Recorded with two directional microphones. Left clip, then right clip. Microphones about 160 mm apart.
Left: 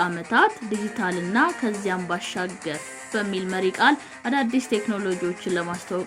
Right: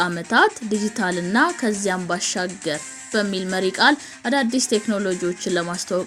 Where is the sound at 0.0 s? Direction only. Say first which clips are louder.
Right 2 dB; 60° right (ahead or behind).